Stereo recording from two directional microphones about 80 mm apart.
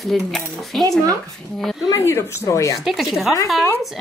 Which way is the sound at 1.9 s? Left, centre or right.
Left.